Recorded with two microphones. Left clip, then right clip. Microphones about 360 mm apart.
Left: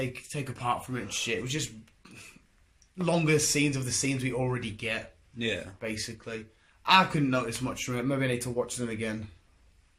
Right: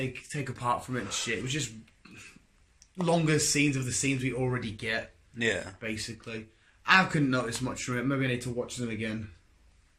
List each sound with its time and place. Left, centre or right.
0.0 s speech: centre
3.0 s speech: centre
5.8 s speech: centre